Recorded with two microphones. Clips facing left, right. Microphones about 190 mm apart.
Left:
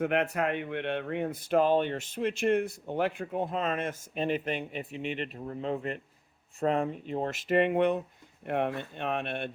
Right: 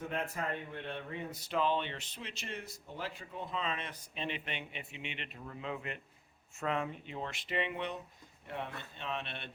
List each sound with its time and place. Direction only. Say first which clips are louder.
0.0 s speech: left 10 dB; 70° left (ahead or behind); by 9.5 s 50° left (ahead or behind)